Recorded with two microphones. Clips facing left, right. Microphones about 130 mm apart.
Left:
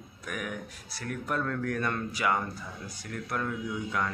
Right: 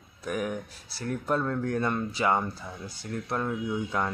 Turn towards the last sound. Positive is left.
turn(degrees=-30)  # may be behind; listen again after turning